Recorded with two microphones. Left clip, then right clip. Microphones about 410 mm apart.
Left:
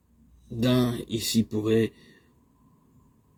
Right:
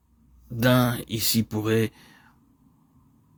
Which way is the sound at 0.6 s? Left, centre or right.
Right.